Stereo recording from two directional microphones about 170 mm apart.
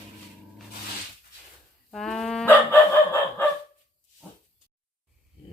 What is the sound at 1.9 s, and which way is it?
Chicken, centre (ahead or behind).